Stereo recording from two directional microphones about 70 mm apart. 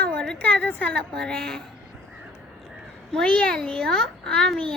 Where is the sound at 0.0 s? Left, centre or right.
Centre.